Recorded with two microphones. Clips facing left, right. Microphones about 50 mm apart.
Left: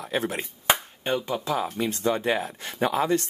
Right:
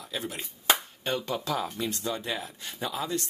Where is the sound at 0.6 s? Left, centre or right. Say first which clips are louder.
Left 2 dB; left.